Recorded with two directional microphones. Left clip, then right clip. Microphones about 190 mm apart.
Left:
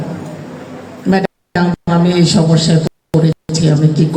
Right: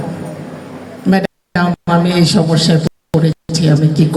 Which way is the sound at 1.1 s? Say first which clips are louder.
Left 1 dB; 40° right (ahead or behind).